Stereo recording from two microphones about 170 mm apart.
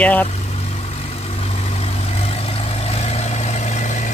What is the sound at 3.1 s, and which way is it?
Vehicle, 40° left (ahead or behind).